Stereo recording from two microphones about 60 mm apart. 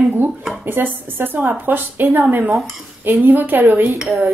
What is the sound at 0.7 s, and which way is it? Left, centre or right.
A woman's voice, right.